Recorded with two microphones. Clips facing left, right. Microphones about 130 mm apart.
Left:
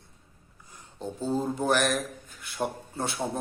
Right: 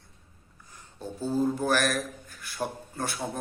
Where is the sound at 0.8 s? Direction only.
20° left (ahead or behind).